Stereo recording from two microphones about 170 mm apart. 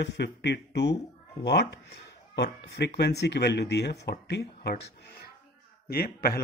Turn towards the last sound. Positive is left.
turn(degrees=65)  # may be behind; listen again after turning